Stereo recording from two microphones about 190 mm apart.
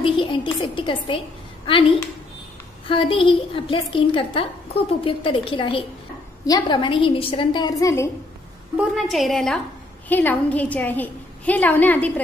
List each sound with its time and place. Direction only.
0.0 s a woman's voice: 25° left (ahead or behind)
2.9 s a woman's voice: 25° left (ahead or behind)
8.7 s a woman's voice: centre (ahead or behind)